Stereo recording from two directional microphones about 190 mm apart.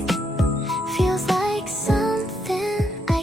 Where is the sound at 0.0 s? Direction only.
Centre (ahead or behind).